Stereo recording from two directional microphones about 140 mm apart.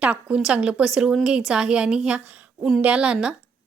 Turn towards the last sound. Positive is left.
turn(degrees=-5)  # may be behind; listen again after turning